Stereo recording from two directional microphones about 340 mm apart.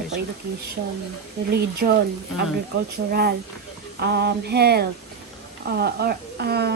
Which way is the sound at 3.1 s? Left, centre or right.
Right.